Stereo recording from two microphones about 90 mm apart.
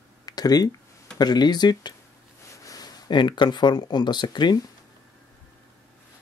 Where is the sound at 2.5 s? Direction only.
40° left (ahead or behind); by 4.6 s 55° left (ahead or behind).